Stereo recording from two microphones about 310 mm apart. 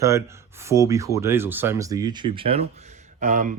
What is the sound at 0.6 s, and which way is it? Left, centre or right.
Speech, centre.